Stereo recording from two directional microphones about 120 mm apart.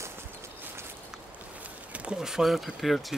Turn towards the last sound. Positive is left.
turn(degrees=0)  # may be behind; listen again after turning